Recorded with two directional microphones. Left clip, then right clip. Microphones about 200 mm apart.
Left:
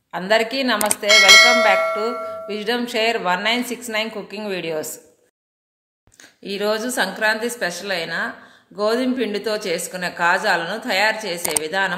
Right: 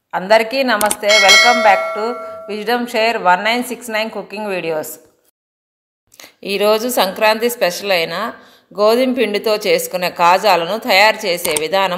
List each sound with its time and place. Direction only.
0.1 s a woman's voice: 15° right (ahead or behind)
0.7 s speech: centre (ahead or behind)
2.1 s music: centre (ahead or behind)
2.4 s a woman's voice: 15° right (ahead or behind)
6.1 s speech: 40° right (ahead or behind)